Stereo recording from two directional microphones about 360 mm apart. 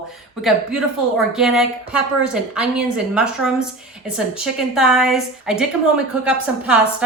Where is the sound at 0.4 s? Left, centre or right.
Centre.